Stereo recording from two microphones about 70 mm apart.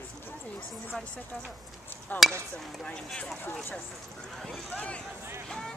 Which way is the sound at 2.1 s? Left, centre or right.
Left.